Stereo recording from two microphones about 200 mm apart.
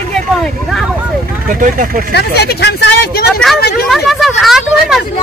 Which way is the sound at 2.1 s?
55° left (ahead or behind).